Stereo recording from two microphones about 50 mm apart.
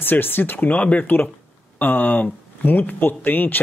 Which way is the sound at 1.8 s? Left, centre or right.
Left.